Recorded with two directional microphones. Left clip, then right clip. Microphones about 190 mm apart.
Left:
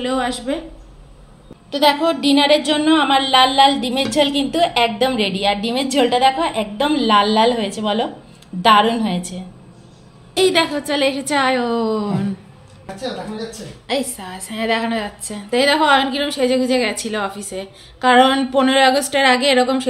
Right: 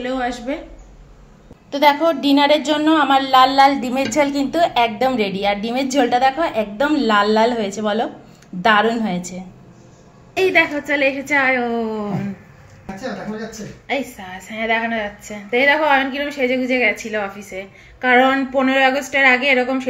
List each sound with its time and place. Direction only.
0.0 s a woman's voice: 10° left (ahead or behind)
1.7 s a woman's voice: 5° right (ahead or behind)
10.3 s a woman's voice: 20° left (ahead or behind)
13.8 s a woman's voice: 25° left (ahead or behind)